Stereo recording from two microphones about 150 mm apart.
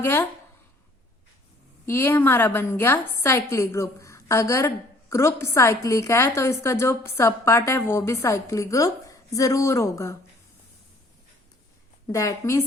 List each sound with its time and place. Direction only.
0.0 s a woman's voice: 15° left (ahead or behind)
1.9 s a woman's voice: 15° left (ahead or behind)
12.1 s a woman's voice: 20° left (ahead or behind)